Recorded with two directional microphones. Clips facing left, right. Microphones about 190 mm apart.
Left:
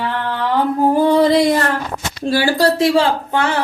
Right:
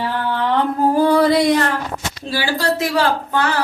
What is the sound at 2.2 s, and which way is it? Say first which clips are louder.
Speech: left 7 dB; 45° left (ahead or behind).